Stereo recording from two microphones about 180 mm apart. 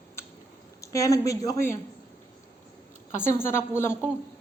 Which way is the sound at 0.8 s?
20° left (ahead or behind).